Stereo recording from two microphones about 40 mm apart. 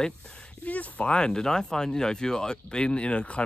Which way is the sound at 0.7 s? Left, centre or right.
Left.